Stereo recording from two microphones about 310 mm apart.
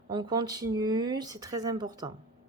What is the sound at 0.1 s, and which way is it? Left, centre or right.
Speech, centre.